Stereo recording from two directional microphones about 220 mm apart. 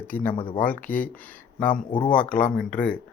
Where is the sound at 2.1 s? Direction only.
5° left (ahead or behind).